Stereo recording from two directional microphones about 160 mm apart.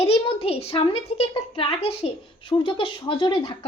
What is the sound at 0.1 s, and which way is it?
A woman's voice, 35° left (ahead or behind).